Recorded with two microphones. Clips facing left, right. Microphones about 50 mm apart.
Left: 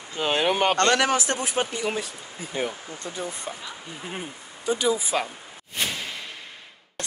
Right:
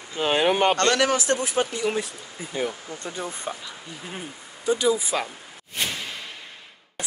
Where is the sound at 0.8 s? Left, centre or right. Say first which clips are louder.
Even; left.